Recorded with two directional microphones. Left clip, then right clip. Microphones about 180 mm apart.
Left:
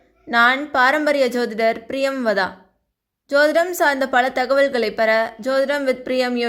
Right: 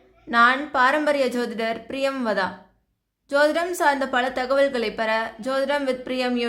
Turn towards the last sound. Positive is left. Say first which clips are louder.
# left 5 dB
turn(degrees=20)  # may be behind; listen again after turning